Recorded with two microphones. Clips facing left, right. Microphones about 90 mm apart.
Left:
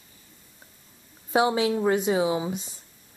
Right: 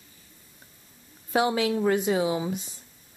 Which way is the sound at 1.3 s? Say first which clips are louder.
Left 2 dB; 25° left (ahead or behind).